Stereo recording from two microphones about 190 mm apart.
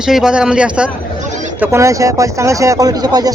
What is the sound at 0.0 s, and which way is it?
Speech, 5° right (ahead or behind).